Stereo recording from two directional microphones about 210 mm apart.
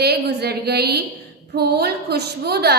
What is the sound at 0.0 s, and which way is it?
A woman's voice, 50° right (ahead or behind).